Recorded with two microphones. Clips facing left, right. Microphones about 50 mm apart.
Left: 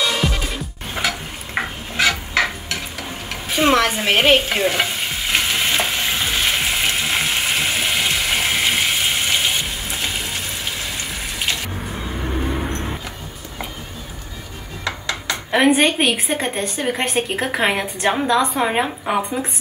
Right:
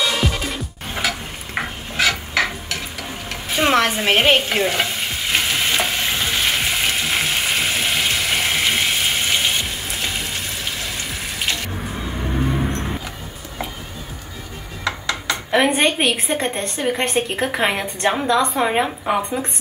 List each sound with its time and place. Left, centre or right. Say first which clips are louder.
0.0 s music: even; centre
3.9 s stir: even; centre
14.9 s a sound: right 2 dB; centre
16.1 s a woman's voice: even; centre